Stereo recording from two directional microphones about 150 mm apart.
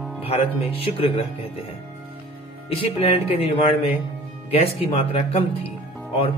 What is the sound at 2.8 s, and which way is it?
Speech, 40° left (ahead or behind).